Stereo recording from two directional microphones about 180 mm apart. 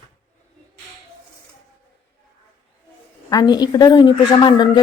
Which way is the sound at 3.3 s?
20° left (ahead or behind).